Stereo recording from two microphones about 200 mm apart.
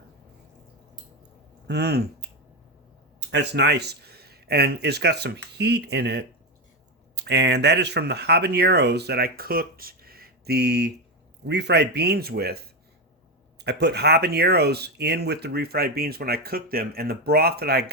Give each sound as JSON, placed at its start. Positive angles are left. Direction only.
{"t": 1.6, "sound": "speech", "side_deg": -55}
{"t": 13.6, "sound": "speech", "side_deg": -55}